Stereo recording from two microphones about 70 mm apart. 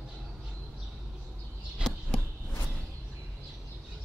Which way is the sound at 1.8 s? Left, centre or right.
Centre.